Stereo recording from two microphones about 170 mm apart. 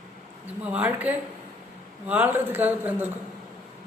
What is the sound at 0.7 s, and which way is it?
A woman's voice, 10° right (ahead or behind).